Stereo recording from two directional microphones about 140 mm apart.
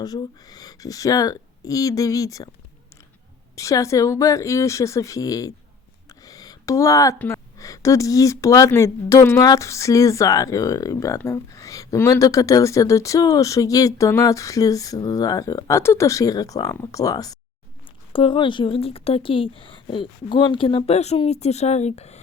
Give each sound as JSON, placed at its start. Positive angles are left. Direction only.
{"t": 0.0, "sound": "speech", "side_deg": 30}
{"t": 3.5, "sound": "speech", "side_deg": 25}
{"t": 6.1, "sound": "a sound", "side_deg": 25}
{"t": 7.2, "sound": "speech", "side_deg": 20}
{"t": 18.1, "sound": "speech", "side_deg": 35}